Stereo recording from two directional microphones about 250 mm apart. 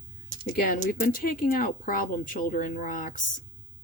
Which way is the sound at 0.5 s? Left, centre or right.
Left.